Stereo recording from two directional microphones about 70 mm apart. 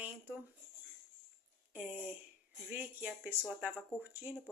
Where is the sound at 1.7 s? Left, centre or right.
Right.